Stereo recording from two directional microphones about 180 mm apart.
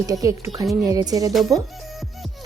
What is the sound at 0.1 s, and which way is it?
Speech, 20° right (ahead or behind).